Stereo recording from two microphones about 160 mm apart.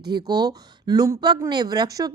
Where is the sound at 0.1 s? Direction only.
25° right (ahead or behind).